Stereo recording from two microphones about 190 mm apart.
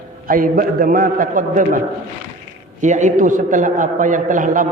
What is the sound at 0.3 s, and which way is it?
A man's voice, 45° right (ahead or behind).